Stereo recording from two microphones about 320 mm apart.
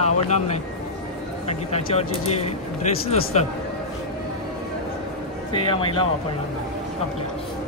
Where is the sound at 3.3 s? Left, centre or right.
Left.